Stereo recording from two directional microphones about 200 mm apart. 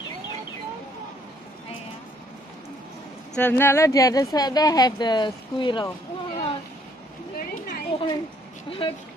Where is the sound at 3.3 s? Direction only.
10° left (ahead or behind).